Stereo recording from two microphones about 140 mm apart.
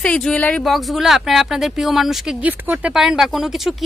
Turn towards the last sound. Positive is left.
turn(degrees=0)  # may be behind; listen again after turning